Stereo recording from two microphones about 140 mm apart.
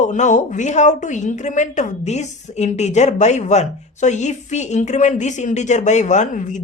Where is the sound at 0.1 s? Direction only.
65° left (ahead or behind).